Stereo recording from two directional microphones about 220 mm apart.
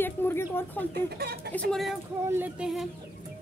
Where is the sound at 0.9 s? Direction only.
45° right (ahead or behind).